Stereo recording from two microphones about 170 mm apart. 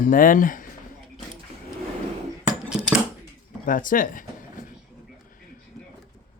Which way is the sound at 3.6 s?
55° left (ahead or behind).